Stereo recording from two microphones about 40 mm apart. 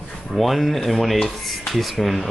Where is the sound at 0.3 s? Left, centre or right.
Centre.